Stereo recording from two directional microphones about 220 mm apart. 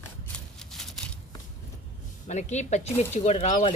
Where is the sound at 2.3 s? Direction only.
30° left (ahead or behind).